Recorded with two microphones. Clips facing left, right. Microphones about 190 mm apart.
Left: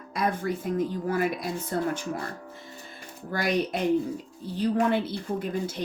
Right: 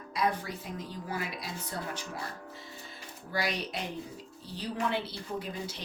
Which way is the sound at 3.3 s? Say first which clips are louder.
Left 7 dB; 50° left (ahead or behind).